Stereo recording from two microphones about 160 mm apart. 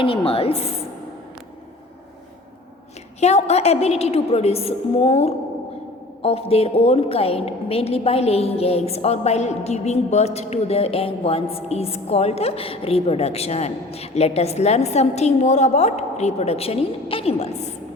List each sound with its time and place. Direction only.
0.0 s a woman's voice: 35° left (ahead or behind)
3.2 s a woman's voice: 45° left (ahead or behind)